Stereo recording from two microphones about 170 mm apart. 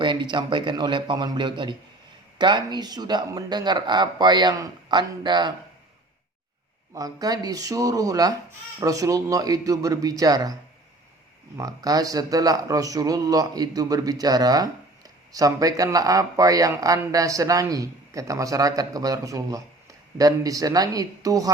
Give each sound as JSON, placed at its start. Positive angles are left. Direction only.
{"t": 0.0, "sound": "speech", "side_deg": -25}
{"t": 6.9, "sound": "speech", "side_deg": -20}
{"t": 11.5, "sound": "speech", "side_deg": -20}